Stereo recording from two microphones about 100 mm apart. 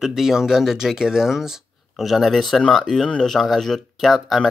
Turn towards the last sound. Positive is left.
turn(degrees=0)  # may be behind; listen again after turning